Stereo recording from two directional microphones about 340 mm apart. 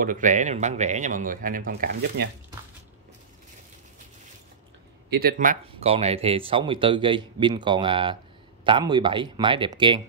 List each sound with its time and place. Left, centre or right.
0.0 s speech: right
5.1 s speech: right